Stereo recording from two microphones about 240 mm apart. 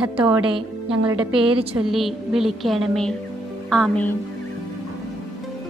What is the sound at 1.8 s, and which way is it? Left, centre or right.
A woman's voice, centre.